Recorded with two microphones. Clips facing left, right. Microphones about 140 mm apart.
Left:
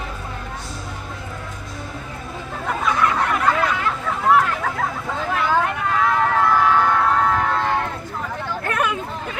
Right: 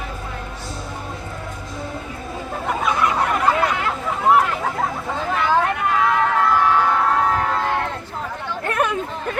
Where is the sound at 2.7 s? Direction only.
15° right (ahead or behind).